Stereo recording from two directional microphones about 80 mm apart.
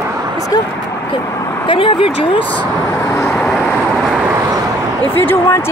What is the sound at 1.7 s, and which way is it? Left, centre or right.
Speech, left.